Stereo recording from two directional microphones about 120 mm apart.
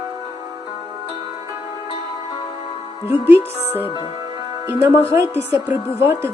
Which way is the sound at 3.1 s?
20° right (ahead or behind).